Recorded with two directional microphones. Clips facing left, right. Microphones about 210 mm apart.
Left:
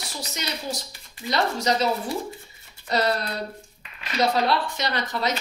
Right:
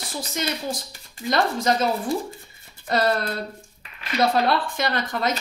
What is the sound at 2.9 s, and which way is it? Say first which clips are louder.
Speech: right 2 dB; 50° right (ahead or behind).